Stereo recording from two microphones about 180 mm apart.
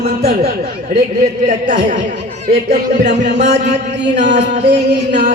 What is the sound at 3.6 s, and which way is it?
Music, 70° right (ahead or behind).